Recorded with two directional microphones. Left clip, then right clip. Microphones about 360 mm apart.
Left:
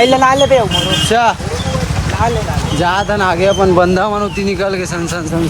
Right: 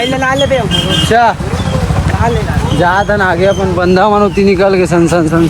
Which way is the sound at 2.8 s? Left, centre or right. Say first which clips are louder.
Right 3 dB; centre.